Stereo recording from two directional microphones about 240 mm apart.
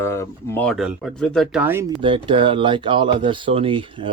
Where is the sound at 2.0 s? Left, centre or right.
Right.